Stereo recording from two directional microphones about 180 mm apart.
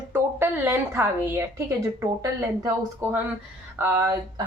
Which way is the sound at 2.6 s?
15° right (ahead or behind).